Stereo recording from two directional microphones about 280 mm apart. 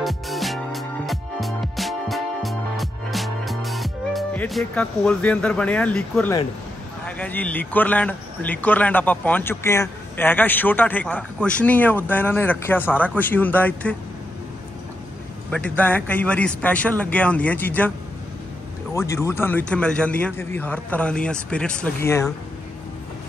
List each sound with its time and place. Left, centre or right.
0.0 s music: centre
7.1 s speech: centre
15.5 s speech: centre
18.9 s speech: centre